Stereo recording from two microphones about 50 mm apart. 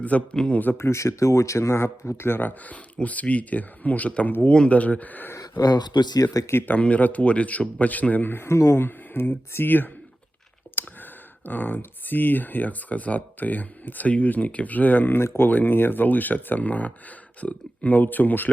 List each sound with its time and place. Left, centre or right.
0.0 s a man's voice: left
0.8 s speech: left
4.5 s speech: left
6.5 s speech: left
6.7 s a man's voice: left
8.4 s speech: left
8.7 s speech: left